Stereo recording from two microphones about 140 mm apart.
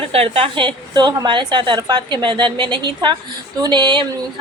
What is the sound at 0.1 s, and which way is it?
A woman's voice, 45° right (ahead or behind).